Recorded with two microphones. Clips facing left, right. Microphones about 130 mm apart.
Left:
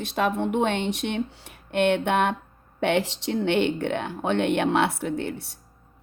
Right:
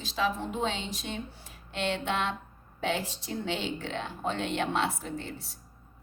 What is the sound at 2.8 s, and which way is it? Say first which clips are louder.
Speech: left 8 dB; 70° left (ahead or behind).